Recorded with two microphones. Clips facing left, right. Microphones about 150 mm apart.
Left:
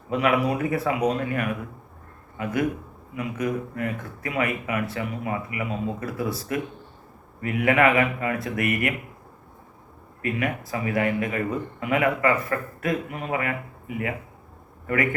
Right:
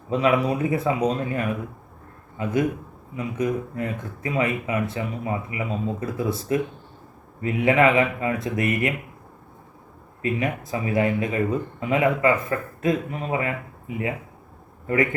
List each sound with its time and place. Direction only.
0.1 s speech: 25° right (ahead or behind)
10.2 s speech: 25° right (ahead or behind)